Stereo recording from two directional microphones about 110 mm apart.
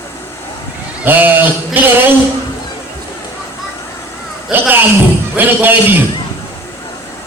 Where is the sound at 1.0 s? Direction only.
15° right (ahead or behind).